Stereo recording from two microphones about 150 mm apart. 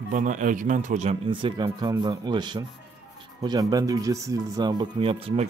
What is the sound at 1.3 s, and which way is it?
Speech, 35° right (ahead or behind).